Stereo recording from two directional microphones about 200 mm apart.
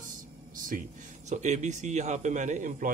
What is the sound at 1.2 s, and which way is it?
A man's voice, 35° right (ahead or behind).